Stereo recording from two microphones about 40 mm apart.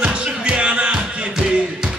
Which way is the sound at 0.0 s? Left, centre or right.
Right.